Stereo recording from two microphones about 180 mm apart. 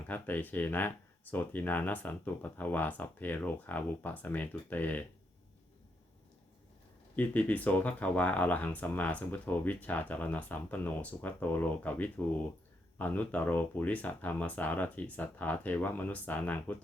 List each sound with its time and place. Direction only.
0.1 s speech: 10° left (ahead or behind)
7.2 s speech: 10° left (ahead or behind)